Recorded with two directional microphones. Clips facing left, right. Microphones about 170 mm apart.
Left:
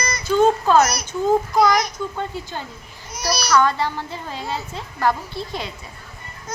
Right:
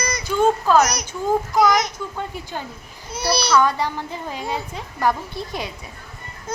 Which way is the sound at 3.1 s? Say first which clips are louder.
Right 2 dB; 30° right (ahead or behind).